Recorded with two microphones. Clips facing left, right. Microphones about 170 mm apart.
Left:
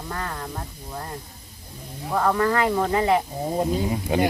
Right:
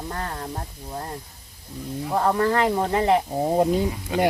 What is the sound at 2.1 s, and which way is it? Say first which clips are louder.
Speech: even; 25° right (ahead or behind).